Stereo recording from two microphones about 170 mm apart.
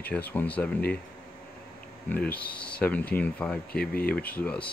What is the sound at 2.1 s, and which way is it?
Speech, 10° left (ahead or behind).